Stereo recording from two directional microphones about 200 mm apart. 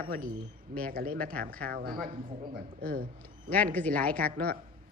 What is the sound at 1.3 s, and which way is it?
Speech, 5° left (ahead or behind).